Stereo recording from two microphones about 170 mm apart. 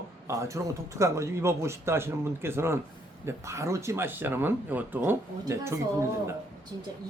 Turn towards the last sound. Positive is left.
turn(degrees=-15)  # may be behind; listen again after turning